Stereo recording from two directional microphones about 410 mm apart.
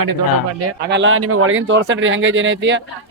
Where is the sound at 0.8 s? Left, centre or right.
Right.